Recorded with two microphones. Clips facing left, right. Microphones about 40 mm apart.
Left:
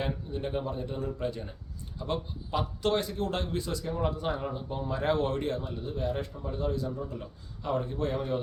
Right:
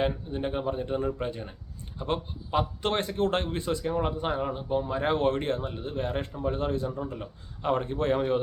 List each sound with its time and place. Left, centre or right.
0.0 s a man's voice: right